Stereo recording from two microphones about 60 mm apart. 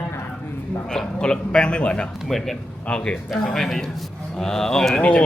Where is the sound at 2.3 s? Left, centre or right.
Centre.